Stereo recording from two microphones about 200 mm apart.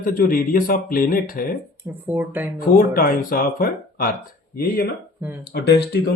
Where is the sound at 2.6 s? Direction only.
45° left (ahead or behind).